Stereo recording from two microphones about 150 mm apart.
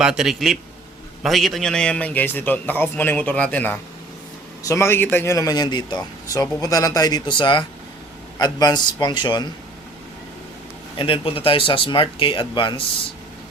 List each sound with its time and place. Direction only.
0.0 s a man's voice: 5° right (ahead or behind); by 9.5 s 30° left (ahead or behind)
10.9 s speech: 35° left (ahead or behind)